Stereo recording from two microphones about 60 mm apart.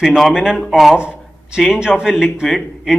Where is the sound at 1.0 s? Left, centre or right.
Centre.